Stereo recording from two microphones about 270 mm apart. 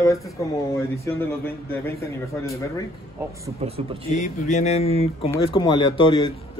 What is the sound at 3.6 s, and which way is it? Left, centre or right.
Speech, right.